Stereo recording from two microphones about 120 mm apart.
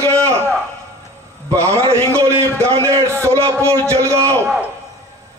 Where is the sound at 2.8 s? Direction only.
25° right (ahead or behind).